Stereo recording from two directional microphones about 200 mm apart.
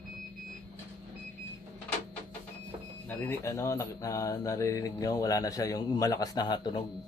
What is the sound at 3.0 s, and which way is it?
Speech, 10° left (ahead or behind).